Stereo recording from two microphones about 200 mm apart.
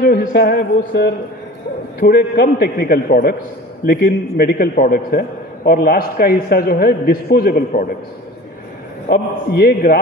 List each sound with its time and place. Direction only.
0.0 s a man's voice: 50° left (ahead or behind)
9.0 s a man's voice: 50° left (ahead or behind)